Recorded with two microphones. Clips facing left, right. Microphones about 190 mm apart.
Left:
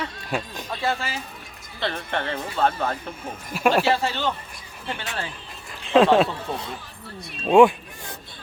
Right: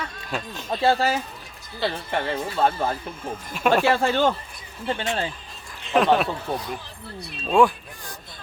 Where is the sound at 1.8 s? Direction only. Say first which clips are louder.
Right 2 dB; 10° right (ahead or behind).